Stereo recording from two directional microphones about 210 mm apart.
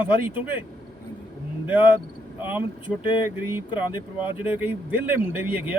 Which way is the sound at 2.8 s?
25° left (ahead or behind).